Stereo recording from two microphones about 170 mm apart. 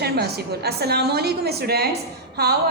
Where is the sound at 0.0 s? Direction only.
70° right (ahead or behind).